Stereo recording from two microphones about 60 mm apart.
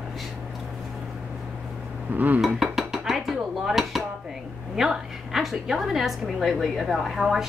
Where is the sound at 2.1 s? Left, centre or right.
Right.